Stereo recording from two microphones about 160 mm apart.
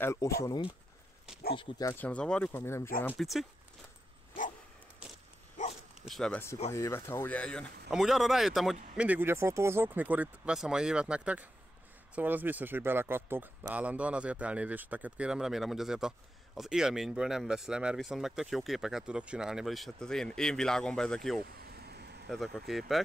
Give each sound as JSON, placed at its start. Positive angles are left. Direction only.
{"t": 0.0, "sound": "speech", "side_deg": 20}
{"t": 2.0, "sound": "speech", "side_deg": 10}
{"t": 3.2, "sound": "speech", "side_deg": 0}
{"t": 5.0, "sound": "dog", "side_deg": -5}
{"t": 6.0, "sound": "speech", "side_deg": 0}
{"t": 6.7, "sound": "speech", "side_deg": 15}
{"t": 21.5, "sound": "vehicle", "side_deg": -80}
{"t": 22.3, "sound": "speech", "side_deg": 0}